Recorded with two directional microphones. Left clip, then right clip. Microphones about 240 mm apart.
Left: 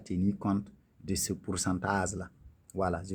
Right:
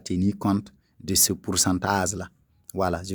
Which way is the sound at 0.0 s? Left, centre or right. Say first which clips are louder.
Right 7 dB; right.